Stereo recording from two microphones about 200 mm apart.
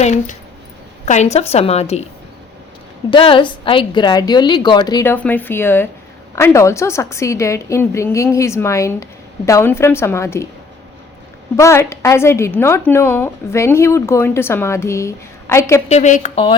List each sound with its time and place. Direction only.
0.0 s a woman's voice: 35° left (ahead or behind)
3.1 s a woman's voice: 25° left (ahead or behind)
5.1 s a woman's voice: 10° left (ahead or behind)
11.5 s a woman's voice: 15° left (ahead or behind)
15.9 s a woman's voice: 35° left (ahead or behind)